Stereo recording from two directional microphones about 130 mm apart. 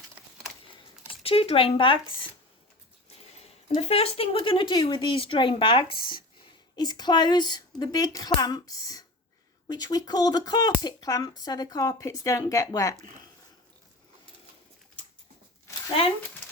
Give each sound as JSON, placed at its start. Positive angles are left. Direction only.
{"t": 1.2, "sound": "speech", "side_deg": 45}
{"t": 3.8, "sound": "speech", "side_deg": 50}